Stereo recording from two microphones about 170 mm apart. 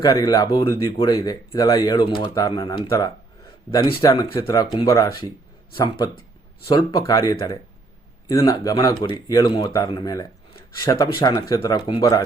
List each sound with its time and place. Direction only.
0.0 s speech: 20° left (ahead or behind)